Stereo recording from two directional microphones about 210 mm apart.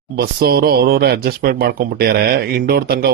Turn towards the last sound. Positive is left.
turn(degrees=-45)  # may be behind; listen again after turning